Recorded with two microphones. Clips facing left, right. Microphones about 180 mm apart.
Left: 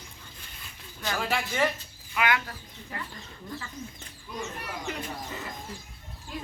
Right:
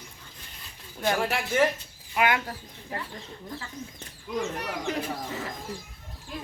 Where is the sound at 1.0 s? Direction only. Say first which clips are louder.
Right 3 dB; 55° right (ahead or behind).